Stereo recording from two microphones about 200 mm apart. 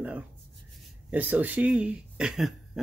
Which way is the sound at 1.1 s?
10° right (ahead or behind).